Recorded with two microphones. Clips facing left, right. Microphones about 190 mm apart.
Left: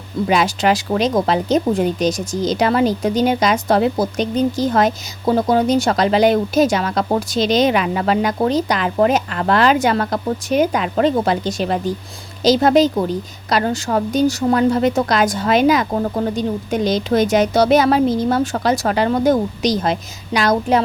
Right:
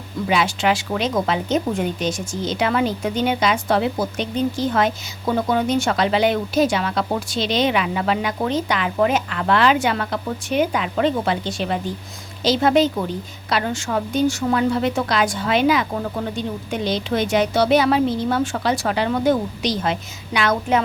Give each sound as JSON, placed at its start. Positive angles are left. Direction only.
{"t": 0.3, "sound": "speech", "side_deg": 40}